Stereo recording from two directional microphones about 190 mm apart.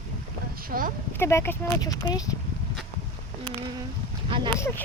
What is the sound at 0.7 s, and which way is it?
Speech, 45° right (ahead or behind).